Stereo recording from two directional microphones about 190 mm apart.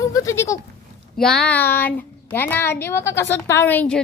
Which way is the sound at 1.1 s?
5° left (ahead or behind).